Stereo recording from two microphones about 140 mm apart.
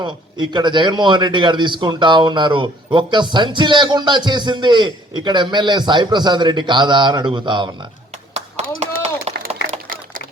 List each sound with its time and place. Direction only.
0.0 s a man's voice: 35° right (ahead or behind)
8.8 s run: 50° right (ahead or behind)
9.6 s a sound: 85° right